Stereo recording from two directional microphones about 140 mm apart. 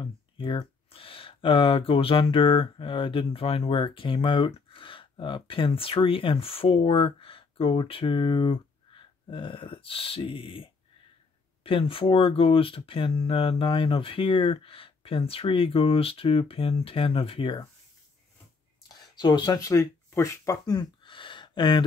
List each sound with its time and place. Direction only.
0.0 s speech: 35° left (ahead or behind)
18.9 s speech: 30° left (ahead or behind)